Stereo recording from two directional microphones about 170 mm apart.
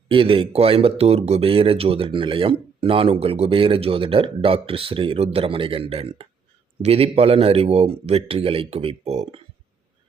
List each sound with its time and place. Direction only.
0.1 s speech: 30° right (ahead or behind)